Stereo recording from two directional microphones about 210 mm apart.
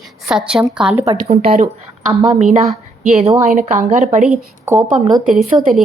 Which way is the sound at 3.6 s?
35° right (ahead or behind).